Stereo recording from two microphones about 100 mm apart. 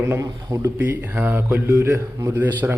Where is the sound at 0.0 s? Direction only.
30° right (ahead or behind).